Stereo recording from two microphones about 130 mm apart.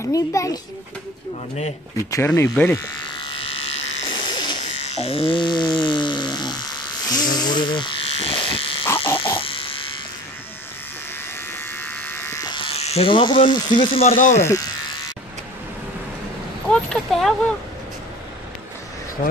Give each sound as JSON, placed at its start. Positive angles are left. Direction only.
{"t": 0.0, "sound": "speech", "side_deg": 25}
{"t": 2.0, "sound": "speech", "side_deg": 20}
{"t": 3.2, "sound": "electric shaver", "side_deg": 45}
{"t": 4.1, "sound": "buzz", "side_deg": 35}
{"t": 4.7, "sound": "electric toothbrush", "side_deg": 50}
{"t": 7.1, "sound": "electric shaver", "side_deg": 30}
{"t": 8.8, "sound": "frog", "side_deg": 20}
{"t": 9.2, "sound": "electric toothbrush", "side_deg": 45}
{"t": 11.8, "sound": "electric shaver", "side_deg": 15}
{"t": 12.4, "sound": "speech", "side_deg": 40}
{"t": 14.1, "sound": "speech", "side_deg": 80}
{"t": 16.7, "sound": "speech", "side_deg": 5}